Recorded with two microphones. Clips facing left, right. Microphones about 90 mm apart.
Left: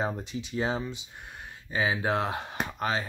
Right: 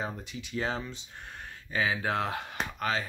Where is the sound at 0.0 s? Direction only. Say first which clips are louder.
Left 5 dB; 30° left (ahead or behind).